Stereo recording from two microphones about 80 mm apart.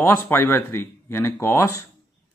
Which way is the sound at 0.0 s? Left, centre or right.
Left.